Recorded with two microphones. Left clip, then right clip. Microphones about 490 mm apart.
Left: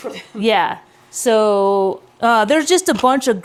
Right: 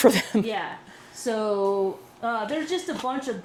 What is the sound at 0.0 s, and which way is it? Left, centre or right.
Speech, right.